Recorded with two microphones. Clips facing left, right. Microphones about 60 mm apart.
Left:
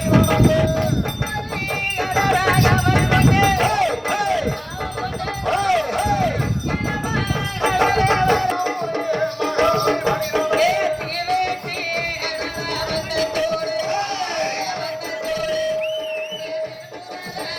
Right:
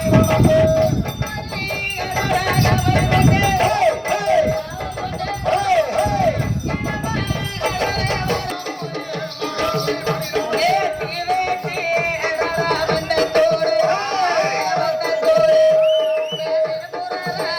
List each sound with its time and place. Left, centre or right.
0.1 s cowbell: centre
2.0 s music: centre
5.5 s a sound: centre
7.6 s music: left
10.5 s music: centre
12.5 s music: right